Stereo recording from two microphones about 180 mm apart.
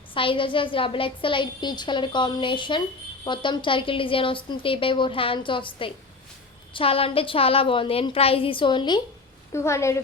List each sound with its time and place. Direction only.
0.1 s a woman's voice: 30° left (ahead or behind)
9.5 s a woman's voice: 15° left (ahead or behind)